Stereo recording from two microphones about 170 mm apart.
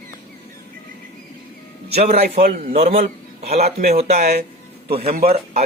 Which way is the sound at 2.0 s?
40° right (ahead or behind).